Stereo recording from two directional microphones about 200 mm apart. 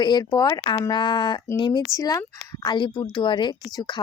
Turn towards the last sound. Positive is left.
turn(degrees=20)  # may be behind; listen again after turning